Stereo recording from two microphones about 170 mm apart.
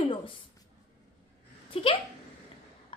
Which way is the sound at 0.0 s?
30° left (ahead or behind).